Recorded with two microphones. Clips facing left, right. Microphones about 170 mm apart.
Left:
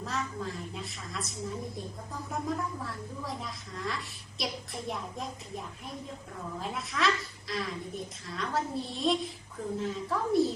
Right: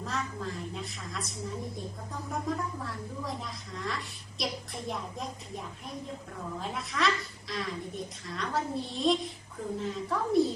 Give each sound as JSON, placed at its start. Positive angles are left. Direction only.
{"t": 0.0, "sound": "a woman's voice", "side_deg": 0}